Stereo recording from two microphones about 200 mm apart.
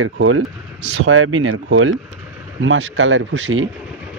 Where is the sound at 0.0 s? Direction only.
85° right.